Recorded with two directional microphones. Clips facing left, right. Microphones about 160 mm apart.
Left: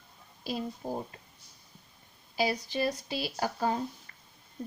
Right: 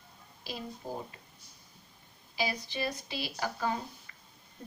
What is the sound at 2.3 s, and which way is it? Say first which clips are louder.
Speech: left 5 dB; 40° left (ahead or behind).